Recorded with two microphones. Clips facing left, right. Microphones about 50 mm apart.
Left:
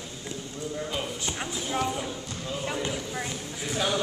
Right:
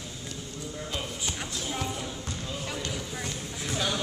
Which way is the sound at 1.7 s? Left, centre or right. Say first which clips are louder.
Left 6 dB; centre.